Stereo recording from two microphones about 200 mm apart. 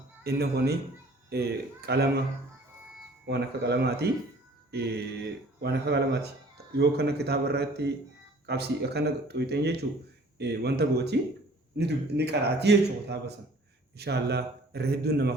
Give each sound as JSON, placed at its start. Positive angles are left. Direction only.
{"t": 0.3, "sound": "a man's voice", "side_deg": -55}
{"t": 3.2, "sound": "a man's voice", "side_deg": -55}